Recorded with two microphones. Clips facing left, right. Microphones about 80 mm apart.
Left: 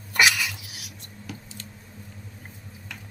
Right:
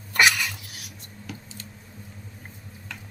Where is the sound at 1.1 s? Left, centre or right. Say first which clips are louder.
Even; centre.